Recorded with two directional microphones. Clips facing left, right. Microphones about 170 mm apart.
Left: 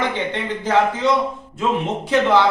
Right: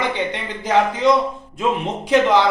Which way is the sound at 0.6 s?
15° right (ahead or behind).